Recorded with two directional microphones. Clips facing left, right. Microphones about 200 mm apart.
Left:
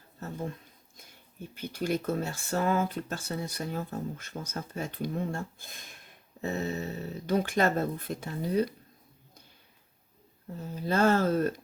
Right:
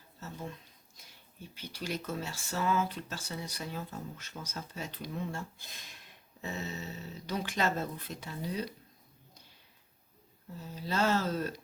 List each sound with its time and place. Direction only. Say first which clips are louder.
0.9 s speech: left 6 dB; 50° left (ahead or behind)
10.6 s speech: left 6 dB; 50° left (ahead or behind)